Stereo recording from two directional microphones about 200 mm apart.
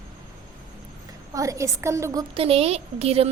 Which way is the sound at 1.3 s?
15° right (ahead or behind).